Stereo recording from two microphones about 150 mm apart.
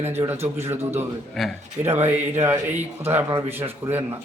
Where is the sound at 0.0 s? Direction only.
15° right (ahead or behind).